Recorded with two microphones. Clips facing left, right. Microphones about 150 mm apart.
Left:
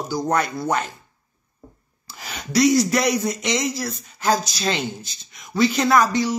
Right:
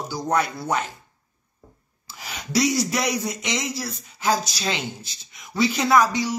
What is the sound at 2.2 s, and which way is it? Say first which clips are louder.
Speech: left 3 dB; 5° right (ahead or behind).